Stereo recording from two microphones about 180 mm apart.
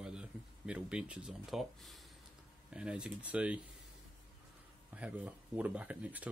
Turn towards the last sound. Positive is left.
turn(degrees=-10)  # may be behind; listen again after turning